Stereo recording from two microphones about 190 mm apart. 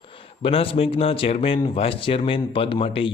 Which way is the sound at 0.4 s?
30° left (ahead or behind).